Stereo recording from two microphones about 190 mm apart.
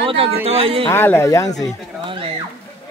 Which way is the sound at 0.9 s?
10° left (ahead or behind).